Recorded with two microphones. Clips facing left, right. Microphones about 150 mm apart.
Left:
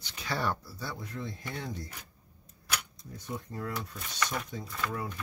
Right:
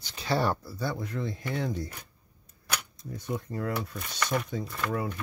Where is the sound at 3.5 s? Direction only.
65° right (ahead or behind).